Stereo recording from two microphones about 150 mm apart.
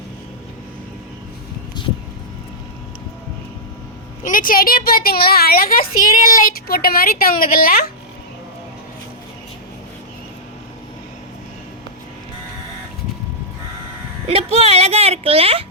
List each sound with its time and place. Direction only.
4.2 s speech: 65° left (ahead or behind); by 5.8 s 80° left
6.2 s a woman's voice: 70° left (ahead or behind)
14.3 s a sound: 40° right (ahead or behind)